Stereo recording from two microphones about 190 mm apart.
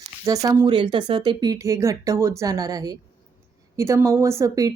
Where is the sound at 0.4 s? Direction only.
20° right (ahead or behind).